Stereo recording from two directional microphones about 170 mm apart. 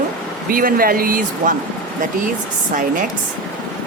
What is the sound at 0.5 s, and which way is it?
Speech, 55° right (ahead or behind).